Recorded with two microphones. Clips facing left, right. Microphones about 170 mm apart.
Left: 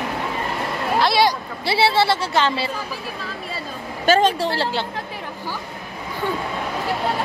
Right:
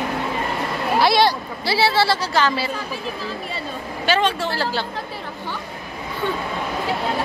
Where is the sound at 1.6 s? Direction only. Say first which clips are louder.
Left 1 dB; 25° left (ahead or behind).